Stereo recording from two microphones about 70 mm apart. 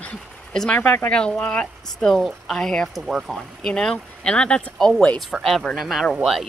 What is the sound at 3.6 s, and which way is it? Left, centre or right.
Speech, centre.